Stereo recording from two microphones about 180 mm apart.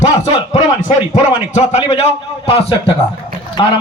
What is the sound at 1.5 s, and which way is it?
A man's voice, 40° left (ahead or behind).